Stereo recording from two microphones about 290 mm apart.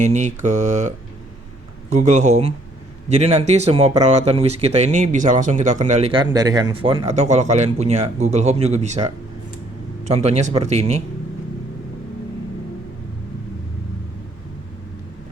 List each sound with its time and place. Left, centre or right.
0.0 s speech: right
10.2 s speech: right